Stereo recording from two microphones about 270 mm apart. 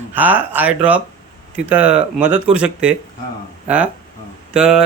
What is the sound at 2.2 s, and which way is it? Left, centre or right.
Speech, right.